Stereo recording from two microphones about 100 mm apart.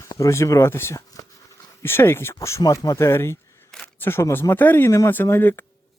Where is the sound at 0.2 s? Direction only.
30° left (ahead or behind).